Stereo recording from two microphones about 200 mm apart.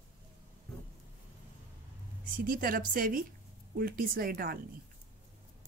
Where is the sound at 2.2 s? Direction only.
45° right (ahead or behind).